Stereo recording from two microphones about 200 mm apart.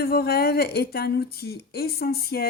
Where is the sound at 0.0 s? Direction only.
50° left (ahead or behind).